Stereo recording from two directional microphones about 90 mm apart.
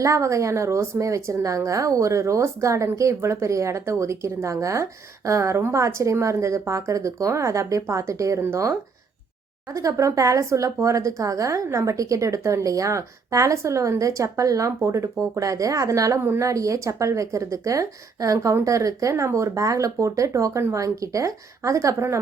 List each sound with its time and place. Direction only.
0.0 s a woman's voice: 35° right (ahead or behind)
9.7 s a woman's voice: 35° right (ahead or behind)